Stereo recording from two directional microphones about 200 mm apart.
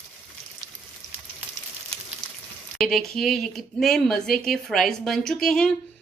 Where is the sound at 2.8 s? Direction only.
Centre (ahead or behind).